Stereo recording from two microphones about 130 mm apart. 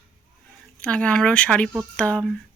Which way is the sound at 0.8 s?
10° left (ahead or behind).